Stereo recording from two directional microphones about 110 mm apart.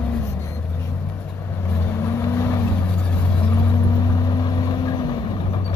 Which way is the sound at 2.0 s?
25° left (ahead or behind).